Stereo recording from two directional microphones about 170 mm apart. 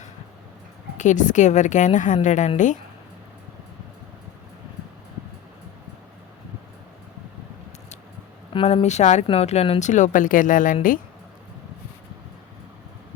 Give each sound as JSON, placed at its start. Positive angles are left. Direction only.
{"t": 0.9, "sound": "a woman's voice", "side_deg": 45}
{"t": 8.5, "sound": "speech", "side_deg": 35}